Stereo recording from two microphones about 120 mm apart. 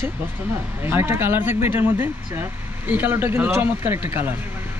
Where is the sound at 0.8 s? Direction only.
20° right (ahead or behind).